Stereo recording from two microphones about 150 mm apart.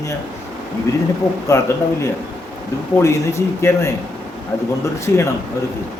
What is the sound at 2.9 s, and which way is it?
Speech, 20° left (ahead or behind).